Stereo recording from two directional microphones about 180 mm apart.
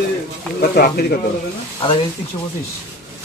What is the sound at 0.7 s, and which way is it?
Speech, 60° left (ahead or behind).